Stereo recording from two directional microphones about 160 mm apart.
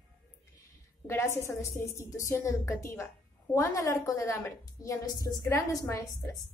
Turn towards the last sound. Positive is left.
turn(degrees=20)  # may be behind; listen again after turning